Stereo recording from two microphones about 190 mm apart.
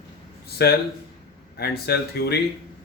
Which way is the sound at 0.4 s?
55° left (ahead or behind).